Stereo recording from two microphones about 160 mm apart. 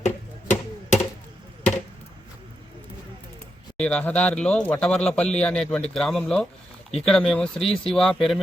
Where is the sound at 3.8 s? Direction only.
5° left (ahead or behind).